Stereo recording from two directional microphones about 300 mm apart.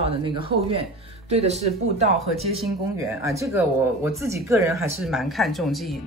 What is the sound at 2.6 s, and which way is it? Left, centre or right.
Speech, centre.